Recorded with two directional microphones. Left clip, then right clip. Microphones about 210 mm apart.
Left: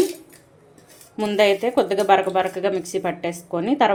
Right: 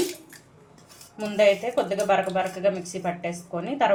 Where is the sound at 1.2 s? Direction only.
50° left (ahead or behind).